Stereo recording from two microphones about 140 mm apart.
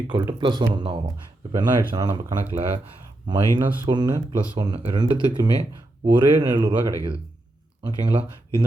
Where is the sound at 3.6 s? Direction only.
15° right (ahead or behind).